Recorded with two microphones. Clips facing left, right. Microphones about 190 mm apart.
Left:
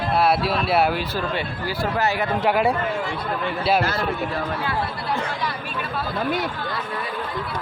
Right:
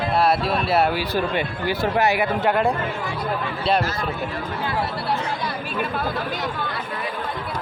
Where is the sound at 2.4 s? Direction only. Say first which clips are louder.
Even; 5° left (ahead or behind).